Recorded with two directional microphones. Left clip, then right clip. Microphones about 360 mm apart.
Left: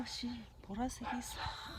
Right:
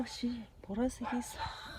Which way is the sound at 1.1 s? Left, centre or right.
Left.